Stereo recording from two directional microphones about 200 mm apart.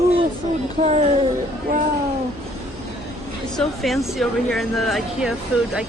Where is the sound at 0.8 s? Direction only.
30° right (ahead or behind).